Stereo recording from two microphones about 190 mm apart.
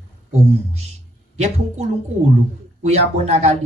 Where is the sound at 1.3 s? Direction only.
35° right (ahead or behind).